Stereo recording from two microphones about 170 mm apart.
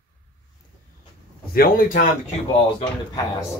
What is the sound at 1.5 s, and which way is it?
Speech, 55° left (ahead or behind).